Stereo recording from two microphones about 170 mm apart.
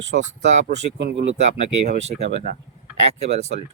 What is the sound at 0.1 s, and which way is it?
Speech, 60° right (ahead or behind).